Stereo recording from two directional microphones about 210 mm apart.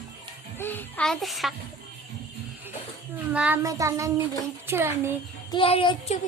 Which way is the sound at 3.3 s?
10° right (ahead or behind).